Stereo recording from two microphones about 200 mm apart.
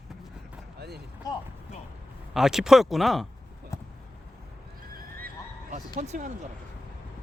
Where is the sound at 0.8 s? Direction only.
55° right (ahead or behind).